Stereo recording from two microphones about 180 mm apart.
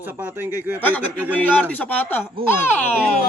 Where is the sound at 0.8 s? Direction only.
10° left (ahead or behind).